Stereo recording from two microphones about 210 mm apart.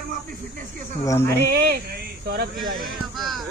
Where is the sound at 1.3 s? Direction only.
50° right (ahead or behind).